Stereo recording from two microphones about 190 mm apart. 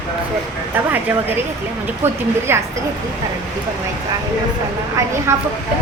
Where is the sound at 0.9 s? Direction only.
10° right (ahead or behind).